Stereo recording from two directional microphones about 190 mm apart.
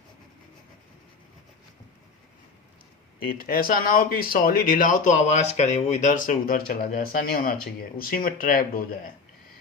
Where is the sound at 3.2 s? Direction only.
50° left (ahead or behind).